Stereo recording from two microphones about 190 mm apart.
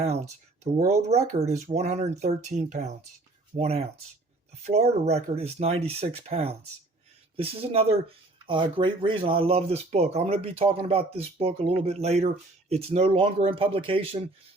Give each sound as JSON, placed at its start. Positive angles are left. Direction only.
{"t": 0.6, "sound": "speech", "side_deg": -35}